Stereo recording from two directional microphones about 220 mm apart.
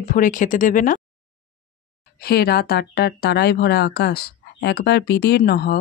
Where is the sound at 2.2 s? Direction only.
45° left (ahead or behind).